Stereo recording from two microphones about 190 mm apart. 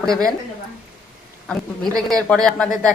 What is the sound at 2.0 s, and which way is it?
Speech, 5° left (ahead or behind).